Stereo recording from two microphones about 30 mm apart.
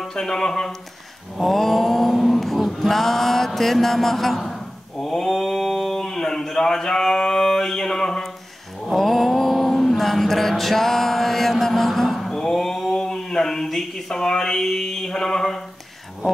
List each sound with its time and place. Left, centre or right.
0.1 s speech: centre
1.4 s mantra: centre
2.1 s music: centre
2.6 s mantra: centre
5.0 s a sound: centre
8.9 s a sound: centre